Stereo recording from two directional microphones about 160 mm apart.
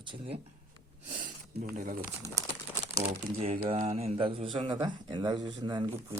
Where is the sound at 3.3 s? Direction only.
40° right (ahead or behind).